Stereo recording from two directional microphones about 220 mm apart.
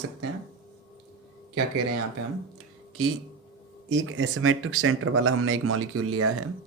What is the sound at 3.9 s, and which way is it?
Speech, 60° right (ahead or behind).